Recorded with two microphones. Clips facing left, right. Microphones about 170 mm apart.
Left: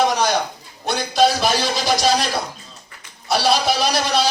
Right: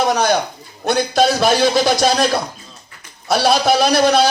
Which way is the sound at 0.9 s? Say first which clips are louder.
Right 2 dB; 50° right (ahead or behind).